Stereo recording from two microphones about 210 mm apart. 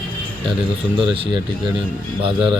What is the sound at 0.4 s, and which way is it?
Speech, 25° right (ahead or behind).